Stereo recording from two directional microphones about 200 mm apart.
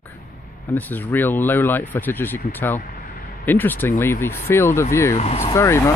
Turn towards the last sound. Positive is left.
turn(degrees=15)  # may be behind; listen again after turning